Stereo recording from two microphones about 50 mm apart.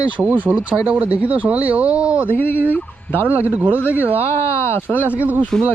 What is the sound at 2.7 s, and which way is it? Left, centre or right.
Turkey, left.